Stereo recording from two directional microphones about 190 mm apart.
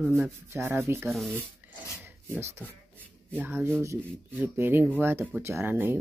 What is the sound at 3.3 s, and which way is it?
Speech, 10° right (ahead or behind).